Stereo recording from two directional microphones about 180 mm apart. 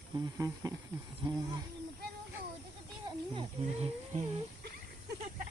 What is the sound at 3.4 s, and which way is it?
Speech, 35° right (ahead or behind).